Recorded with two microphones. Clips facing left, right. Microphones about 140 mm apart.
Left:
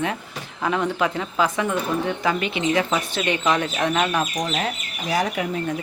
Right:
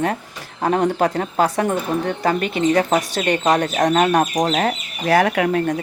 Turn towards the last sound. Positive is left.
turn(degrees=-65)  # may be behind; listen again after turning